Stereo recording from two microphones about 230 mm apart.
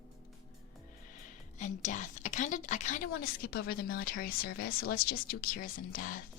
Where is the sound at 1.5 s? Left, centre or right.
Left.